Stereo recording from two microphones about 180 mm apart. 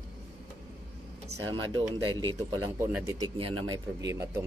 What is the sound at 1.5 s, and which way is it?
Speech, 25° right (ahead or behind).